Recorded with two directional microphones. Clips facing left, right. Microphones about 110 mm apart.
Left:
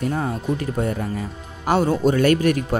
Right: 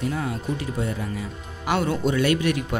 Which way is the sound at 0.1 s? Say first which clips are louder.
Left 4 dB; 45° left (ahead or behind).